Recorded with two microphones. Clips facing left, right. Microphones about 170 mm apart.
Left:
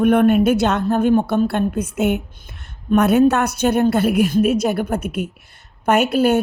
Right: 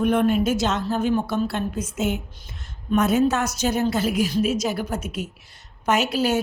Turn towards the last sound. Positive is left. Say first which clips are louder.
# left 6 dB
turn(degrees=55)  # may be behind; listen again after turning